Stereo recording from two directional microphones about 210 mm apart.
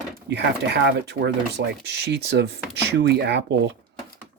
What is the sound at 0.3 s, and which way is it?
Speech, 50° right (ahead or behind).